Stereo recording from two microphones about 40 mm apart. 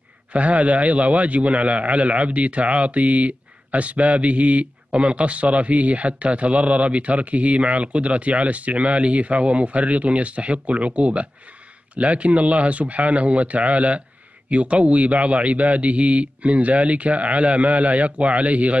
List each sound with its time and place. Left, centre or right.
0.3 s a man's voice: right